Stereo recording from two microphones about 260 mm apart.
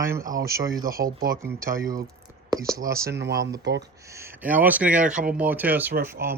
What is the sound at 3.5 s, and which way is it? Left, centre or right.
Speech, right.